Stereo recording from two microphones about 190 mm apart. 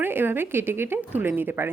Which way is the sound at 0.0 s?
10° right (ahead or behind).